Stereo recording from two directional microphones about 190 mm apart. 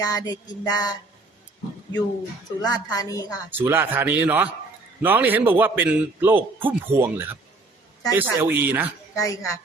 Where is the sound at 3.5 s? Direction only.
10° right (ahead or behind).